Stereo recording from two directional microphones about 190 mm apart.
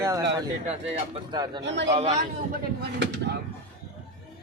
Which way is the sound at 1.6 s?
70° right (ahead or behind).